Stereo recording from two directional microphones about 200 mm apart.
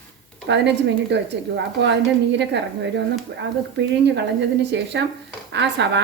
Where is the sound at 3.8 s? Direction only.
60° right (ahead or behind).